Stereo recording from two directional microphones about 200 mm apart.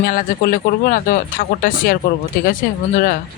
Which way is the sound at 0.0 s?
45° left (ahead or behind).